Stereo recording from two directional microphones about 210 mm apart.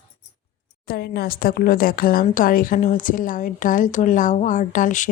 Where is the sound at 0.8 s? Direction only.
50° left (ahead or behind).